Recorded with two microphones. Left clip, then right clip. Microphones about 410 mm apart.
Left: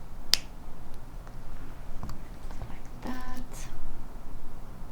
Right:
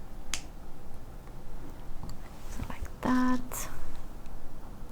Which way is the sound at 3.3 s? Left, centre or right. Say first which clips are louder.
Right 11 dB; right.